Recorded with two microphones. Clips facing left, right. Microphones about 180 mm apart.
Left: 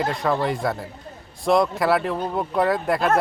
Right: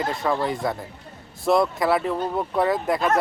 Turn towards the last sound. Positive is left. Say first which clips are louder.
# left 1 dB
turn(degrees=0)  # may be behind; listen again after turning